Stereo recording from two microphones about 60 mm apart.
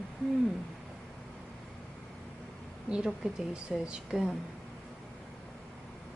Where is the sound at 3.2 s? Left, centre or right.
Centre.